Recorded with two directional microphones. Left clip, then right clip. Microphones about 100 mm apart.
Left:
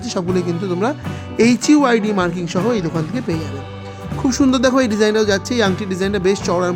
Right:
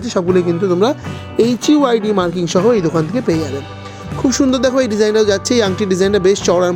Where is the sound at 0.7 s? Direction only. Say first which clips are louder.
Right 5 dB; 30° right (ahead or behind).